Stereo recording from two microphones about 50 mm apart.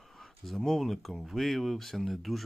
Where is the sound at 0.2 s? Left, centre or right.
Centre.